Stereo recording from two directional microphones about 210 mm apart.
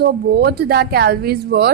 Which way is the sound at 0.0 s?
50° right (ahead or behind).